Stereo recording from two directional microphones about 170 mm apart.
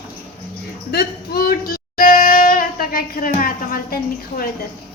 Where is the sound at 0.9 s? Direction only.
70° left (ahead or behind).